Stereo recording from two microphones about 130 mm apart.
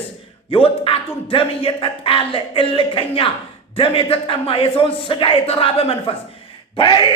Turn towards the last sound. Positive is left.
turn(degrees=40)  # may be behind; listen again after turning